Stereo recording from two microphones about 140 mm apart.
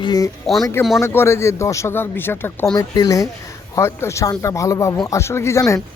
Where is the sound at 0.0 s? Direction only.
30° left (ahead or behind).